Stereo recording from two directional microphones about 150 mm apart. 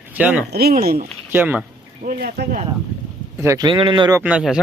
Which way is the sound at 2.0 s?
70° right (ahead or behind).